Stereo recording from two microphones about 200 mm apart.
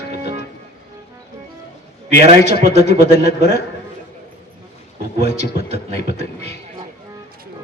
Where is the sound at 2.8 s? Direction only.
55° left (ahead or behind).